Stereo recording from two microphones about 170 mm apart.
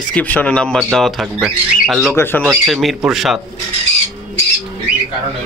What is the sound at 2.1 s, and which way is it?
Speech, 15° left (ahead or behind).